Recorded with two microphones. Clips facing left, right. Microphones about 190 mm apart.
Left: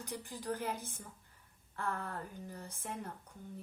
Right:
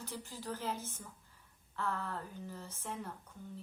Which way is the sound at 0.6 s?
15° left (ahead or behind).